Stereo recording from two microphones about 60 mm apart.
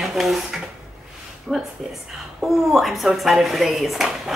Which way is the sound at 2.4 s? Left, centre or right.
Centre.